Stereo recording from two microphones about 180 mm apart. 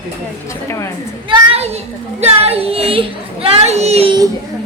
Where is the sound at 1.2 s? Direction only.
30° right (ahead or behind).